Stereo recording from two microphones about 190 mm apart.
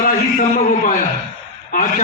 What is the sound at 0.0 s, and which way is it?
A man's voice, 40° left (ahead or behind).